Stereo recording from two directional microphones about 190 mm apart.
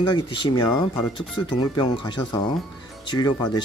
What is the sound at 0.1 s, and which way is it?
Speech, 25° left (ahead or behind).